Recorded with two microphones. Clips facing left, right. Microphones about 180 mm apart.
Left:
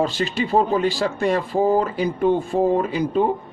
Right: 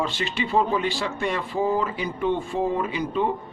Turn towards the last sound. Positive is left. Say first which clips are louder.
# left 6 dB
turn(degrees=40)  # may be behind; listen again after turning